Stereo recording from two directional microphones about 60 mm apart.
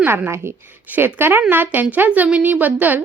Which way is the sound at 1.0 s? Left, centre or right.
Right.